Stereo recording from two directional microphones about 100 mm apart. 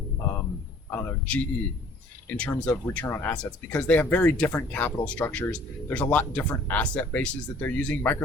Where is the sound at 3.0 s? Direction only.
25° left (ahead or behind).